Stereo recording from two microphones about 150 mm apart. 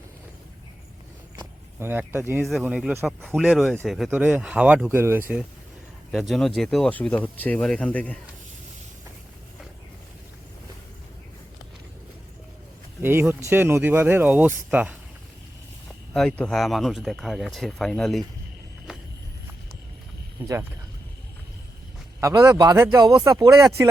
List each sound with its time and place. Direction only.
1.8 s speech: 15° right (ahead or behind)
2.4 s speech: centre (ahead or behind)
6.1 s speech: centre (ahead or behind)
13.0 s speech: 15° right (ahead or behind)
16.1 s speech: 5° left (ahead or behind)
20.4 s speech: 10° right (ahead or behind)
22.2 s speech: 25° right (ahead or behind)